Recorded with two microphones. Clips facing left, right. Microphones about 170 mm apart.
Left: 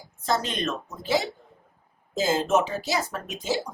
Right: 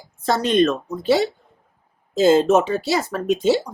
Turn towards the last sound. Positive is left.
turn(degrees=-65)  # may be behind; listen again after turning